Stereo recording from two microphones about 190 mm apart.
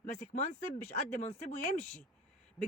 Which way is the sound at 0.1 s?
40° left (ahead or behind).